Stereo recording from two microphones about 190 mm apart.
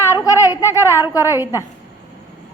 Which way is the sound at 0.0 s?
15° left (ahead or behind).